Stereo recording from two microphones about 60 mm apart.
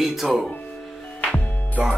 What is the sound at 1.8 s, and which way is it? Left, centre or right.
Speech, right.